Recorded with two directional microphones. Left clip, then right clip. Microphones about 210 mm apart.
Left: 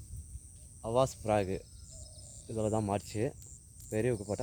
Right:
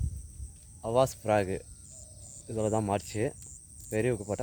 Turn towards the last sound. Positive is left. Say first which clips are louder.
# right 3 dB
turn(degrees=-5)  # may be behind; listen again after turning